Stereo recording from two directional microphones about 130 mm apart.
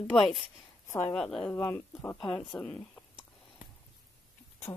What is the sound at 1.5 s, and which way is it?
Speech, 15° left (ahead or behind).